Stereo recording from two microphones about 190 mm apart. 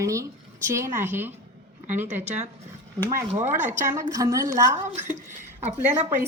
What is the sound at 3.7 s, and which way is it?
Speech, 15° right (ahead or behind).